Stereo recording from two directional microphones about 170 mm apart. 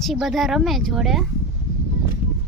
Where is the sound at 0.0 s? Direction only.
Centre (ahead or behind).